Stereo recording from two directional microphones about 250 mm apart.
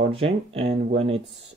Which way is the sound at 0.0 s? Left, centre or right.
Right.